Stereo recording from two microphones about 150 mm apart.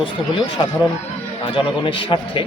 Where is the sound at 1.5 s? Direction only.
35° left (ahead or behind).